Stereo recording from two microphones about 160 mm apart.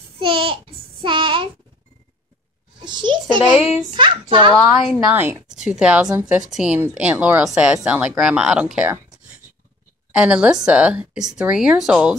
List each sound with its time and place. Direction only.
0.2 s child singing: 35° right (ahead or behind)
2.8 s a child's voice: 30° right (ahead or behind)
4.6 s speech: centre (ahead or behind)
5.1 s a woman's voice: 10° right (ahead or behind)